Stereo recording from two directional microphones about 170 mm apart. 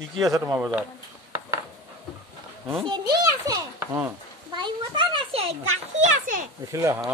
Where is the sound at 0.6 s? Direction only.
10° right (ahead or behind).